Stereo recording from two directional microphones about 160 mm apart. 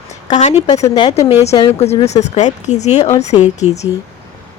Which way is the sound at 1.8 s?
40° left (ahead or behind).